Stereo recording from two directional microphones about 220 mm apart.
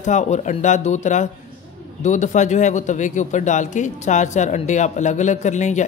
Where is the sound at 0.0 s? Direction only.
30° left (ahead or behind).